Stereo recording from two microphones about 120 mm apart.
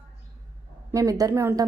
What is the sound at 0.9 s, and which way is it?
Speech, 30° right (ahead or behind).